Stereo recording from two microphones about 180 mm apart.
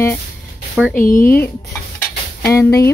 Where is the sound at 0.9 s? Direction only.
50° left (ahead or behind).